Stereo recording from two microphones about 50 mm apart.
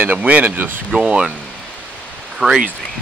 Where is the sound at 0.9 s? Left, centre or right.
Centre.